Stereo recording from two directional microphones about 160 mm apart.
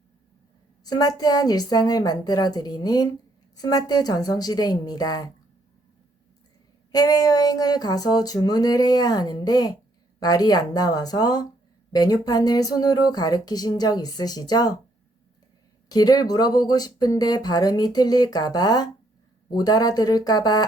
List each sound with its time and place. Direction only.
0.9 s speech: 25° left (ahead or behind)
6.9 s speech: 25° left (ahead or behind)
15.9 s speech: 25° left (ahead or behind)